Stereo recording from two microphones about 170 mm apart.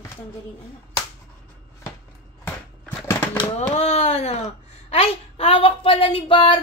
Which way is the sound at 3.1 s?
15° left (ahead or behind).